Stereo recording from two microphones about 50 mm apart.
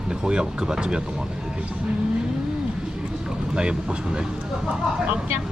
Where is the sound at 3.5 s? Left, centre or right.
Centre.